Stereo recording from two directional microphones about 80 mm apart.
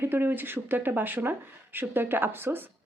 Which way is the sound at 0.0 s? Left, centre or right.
Right.